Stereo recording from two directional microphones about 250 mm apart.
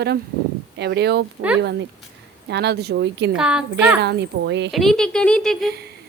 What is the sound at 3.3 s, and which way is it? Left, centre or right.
Speech, centre.